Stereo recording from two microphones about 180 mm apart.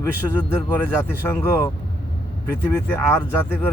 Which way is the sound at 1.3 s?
15° left (ahead or behind).